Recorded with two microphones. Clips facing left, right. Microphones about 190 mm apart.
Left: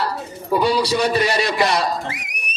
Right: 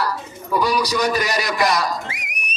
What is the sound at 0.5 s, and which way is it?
A man's voice, 25° left (ahead or behind).